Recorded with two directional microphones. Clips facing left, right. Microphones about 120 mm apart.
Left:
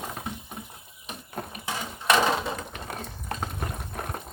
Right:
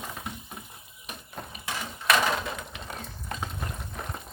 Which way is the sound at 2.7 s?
50° left (ahead or behind).